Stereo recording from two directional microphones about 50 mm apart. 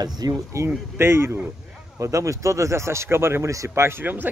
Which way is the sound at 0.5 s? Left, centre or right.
Right.